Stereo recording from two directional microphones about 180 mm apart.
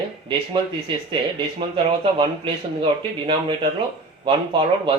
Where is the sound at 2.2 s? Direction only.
30° right (ahead or behind).